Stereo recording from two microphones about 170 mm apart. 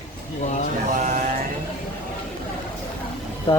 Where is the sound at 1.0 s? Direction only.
50° right (ahead or behind).